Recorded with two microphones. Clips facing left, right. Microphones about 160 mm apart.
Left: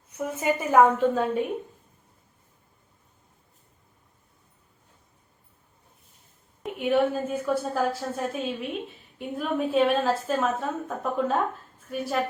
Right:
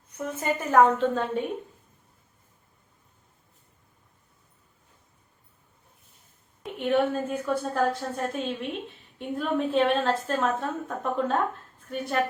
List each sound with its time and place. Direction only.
0.2 s a woman's voice: 10° left (ahead or behind)
6.7 s a woman's voice: 5° left (ahead or behind)